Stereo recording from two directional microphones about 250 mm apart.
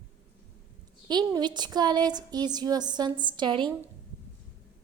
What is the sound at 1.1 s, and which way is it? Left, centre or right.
A woman's voice, centre.